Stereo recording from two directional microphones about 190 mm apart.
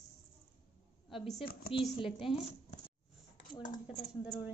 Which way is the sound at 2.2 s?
Centre (ahead or behind).